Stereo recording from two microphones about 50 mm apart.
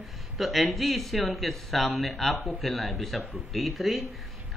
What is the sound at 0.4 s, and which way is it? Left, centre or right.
Speech, centre.